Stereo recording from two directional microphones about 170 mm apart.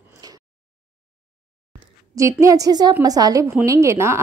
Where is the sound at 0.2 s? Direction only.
20° right (ahead or behind).